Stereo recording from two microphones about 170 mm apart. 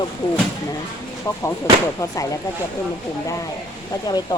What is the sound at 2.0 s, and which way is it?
Speech, 20° left (ahead or behind).